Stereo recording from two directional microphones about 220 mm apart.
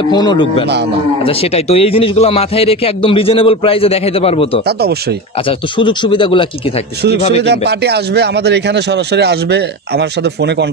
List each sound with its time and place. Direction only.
0.1 s a man's voice: 20° left (ahead or behind)
5.8 s a man's voice: 20° left (ahead or behind)
7.4 s speech: 50° right (ahead or behind)